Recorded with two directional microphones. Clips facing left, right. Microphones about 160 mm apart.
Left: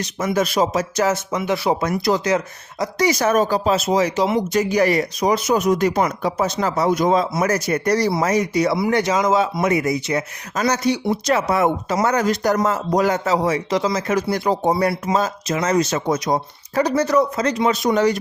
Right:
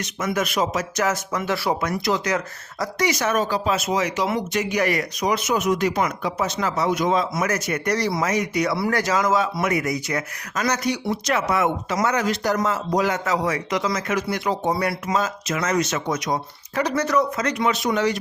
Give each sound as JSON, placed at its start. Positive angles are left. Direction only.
{"t": 0.0, "sound": "speech", "side_deg": 30}
{"t": 3.0, "sound": "speech", "side_deg": 35}
{"t": 8.7, "sound": "speech", "side_deg": 20}